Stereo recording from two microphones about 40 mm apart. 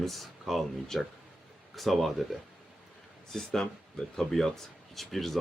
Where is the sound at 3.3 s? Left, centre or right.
Centre.